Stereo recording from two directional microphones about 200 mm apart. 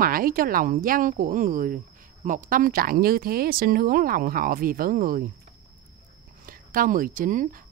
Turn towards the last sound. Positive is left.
turn(degrees=-40)  # may be behind; listen again after turning